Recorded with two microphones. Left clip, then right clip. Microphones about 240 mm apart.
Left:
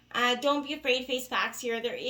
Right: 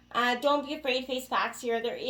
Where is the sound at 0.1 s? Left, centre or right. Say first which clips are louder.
Even; left.